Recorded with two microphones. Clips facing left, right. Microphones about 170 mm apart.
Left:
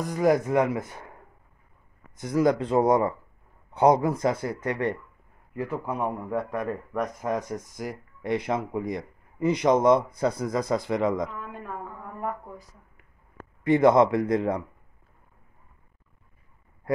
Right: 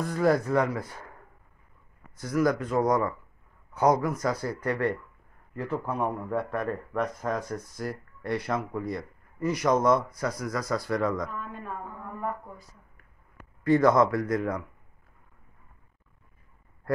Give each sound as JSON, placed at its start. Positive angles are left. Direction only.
{"t": 0.0, "sound": "speech", "side_deg": 15}
{"t": 2.1, "sound": "speech", "side_deg": 20}
{"t": 13.7, "sound": "speech", "side_deg": 20}